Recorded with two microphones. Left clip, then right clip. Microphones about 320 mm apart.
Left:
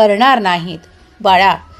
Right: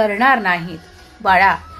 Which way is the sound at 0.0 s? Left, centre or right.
Left.